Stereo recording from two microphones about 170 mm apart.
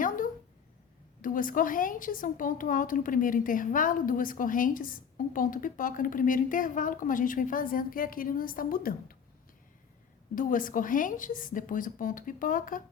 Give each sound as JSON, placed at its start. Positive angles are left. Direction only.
{"t": 1.2, "sound": "a woman's voice", "side_deg": 55}
{"t": 10.3, "sound": "a woman's voice", "side_deg": 55}